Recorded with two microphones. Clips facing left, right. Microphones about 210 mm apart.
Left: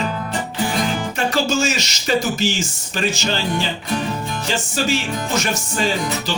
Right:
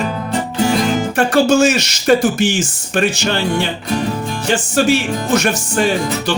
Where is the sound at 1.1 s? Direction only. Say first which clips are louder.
Right 9 dB; 55° right (ahead or behind).